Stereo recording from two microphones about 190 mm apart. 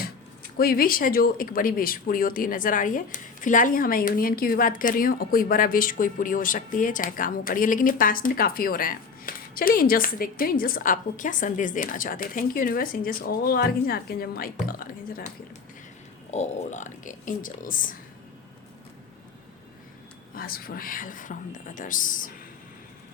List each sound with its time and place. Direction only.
0.5 s speech: 50° left (ahead or behind)
16.3 s speech: 40° left (ahead or behind)
20.3 s speech: 50° left (ahead or behind)